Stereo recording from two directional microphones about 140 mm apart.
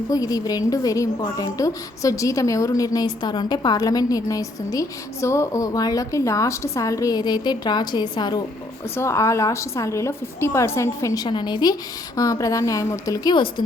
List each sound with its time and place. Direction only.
0.1 s a woman's voice: 25° left (ahead or behind)
9.0 s a woman's voice: 20° left (ahead or behind)